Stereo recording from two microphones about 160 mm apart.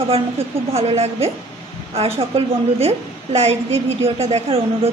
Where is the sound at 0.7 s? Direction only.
40° right (ahead or behind).